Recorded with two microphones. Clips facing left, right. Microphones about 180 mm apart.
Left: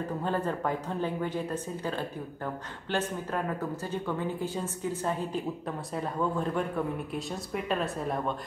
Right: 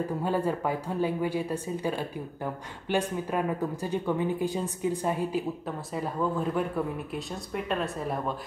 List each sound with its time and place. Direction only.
0.2 s speech: 10° right (ahead or behind)